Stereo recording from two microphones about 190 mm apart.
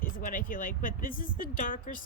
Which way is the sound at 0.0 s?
45° left (ahead or behind).